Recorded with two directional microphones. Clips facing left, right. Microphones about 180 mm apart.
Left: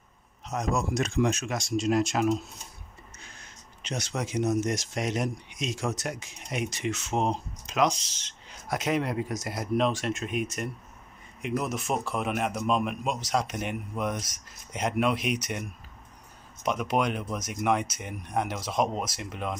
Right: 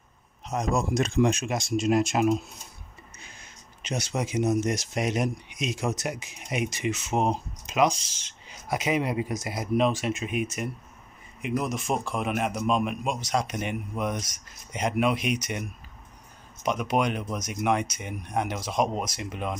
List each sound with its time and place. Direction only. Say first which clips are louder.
0.7 s speech: right 3 dB; 30° right (ahead or behind)
1.2 s speech: right 3 dB; 15° right (ahead or behind)
3.8 s a man's voice: right 3 dB; 5° right (ahead or behind)
16.6 s a man's voice: right 1 dB; centre (ahead or behind)